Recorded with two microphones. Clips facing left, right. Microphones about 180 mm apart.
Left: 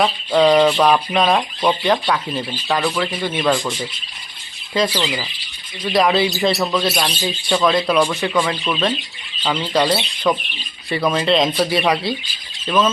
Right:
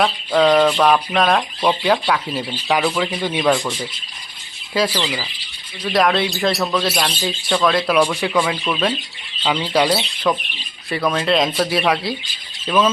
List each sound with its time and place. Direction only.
0.0 s speech: centre (ahead or behind); by 3.5 s 15° right (ahead or behind)
3.5 s speech: centre (ahead or behind)